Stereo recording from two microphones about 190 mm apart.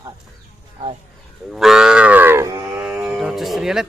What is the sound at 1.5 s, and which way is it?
Livestock, centre (ahead or behind).